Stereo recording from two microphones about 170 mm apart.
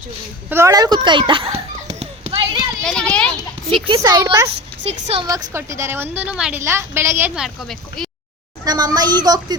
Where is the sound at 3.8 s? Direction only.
25° right (ahead or behind).